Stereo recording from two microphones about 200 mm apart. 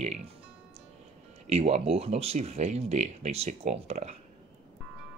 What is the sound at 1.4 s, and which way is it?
Speech, 30° right (ahead or behind).